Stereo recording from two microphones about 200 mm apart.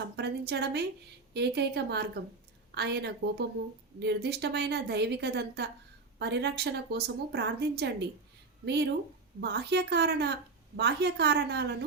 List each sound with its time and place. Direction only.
0.2 s a woman's voice: 55° right (ahead or behind)